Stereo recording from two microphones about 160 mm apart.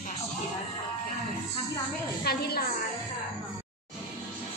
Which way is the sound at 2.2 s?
80° left.